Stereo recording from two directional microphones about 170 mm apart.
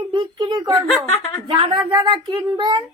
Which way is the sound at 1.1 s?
35° left (ahead or behind).